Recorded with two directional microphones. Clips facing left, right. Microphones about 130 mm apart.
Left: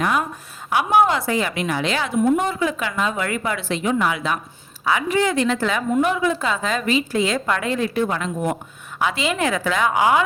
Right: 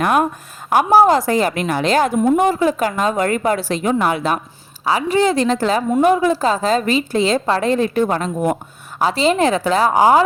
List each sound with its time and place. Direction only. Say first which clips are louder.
0.0 s speech: right 5 dB; 55° right (ahead or behind)
0.7 s a woman's voice: right 5 dB; 40° right (ahead or behind)
4.9 s a woman's voice: right 4 dB; 30° right (ahead or behind)